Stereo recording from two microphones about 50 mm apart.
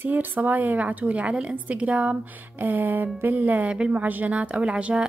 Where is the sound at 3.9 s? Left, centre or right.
Right.